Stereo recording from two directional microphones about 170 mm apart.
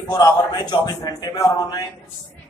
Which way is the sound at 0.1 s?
25° left (ahead or behind).